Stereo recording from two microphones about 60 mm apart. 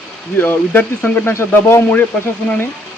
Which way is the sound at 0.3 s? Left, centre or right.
Left.